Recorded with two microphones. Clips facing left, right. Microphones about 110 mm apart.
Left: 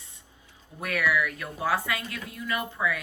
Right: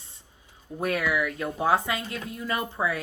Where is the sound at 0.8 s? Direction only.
30° right (ahead or behind).